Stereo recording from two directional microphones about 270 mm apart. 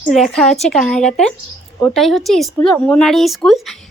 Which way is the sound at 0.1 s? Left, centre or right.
Centre.